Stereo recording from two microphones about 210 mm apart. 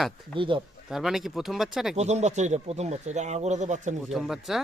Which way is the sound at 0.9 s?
Centre (ahead or behind).